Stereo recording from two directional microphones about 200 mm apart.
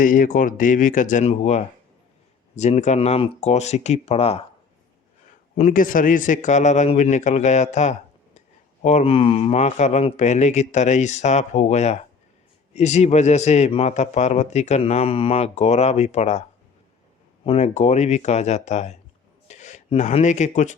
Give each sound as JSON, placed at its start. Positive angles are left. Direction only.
{"t": 0.0, "sound": "a man's voice", "side_deg": 40}
{"t": 5.5, "sound": "a man's voice", "side_deg": 40}
{"t": 17.4, "sound": "a man's voice", "side_deg": 30}